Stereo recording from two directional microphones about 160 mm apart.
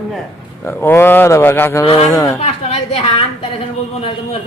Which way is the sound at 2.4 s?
45° left (ahead or behind).